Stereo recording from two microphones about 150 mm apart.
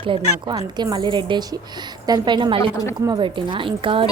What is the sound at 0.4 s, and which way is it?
A woman's voice, 25° right (ahead or behind).